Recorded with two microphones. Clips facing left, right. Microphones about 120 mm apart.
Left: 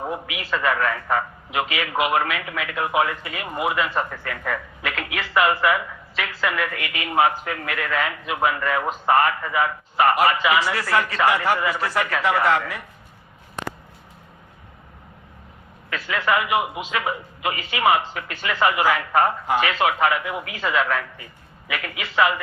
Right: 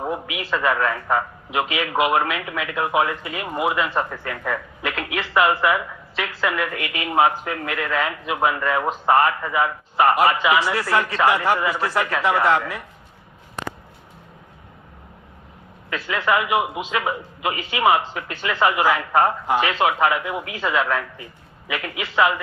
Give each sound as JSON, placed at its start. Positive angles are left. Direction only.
{"t": 0.3, "sound": "speech", "side_deg": -25}
{"t": 3.4, "sound": "speech", "side_deg": -10}
{"t": 3.7, "sound": "speech", "side_deg": -25}
{"t": 5.1, "sound": "speech", "side_deg": -30}
{"t": 5.5, "sound": "speech", "side_deg": -20}
{"t": 7.2, "sound": "speech", "side_deg": -30}
{"t": 15.9, "sound": "a man's voice", "side_deg": -20}
{"t": 17.5, "sound": "speech", "side_deg": -25}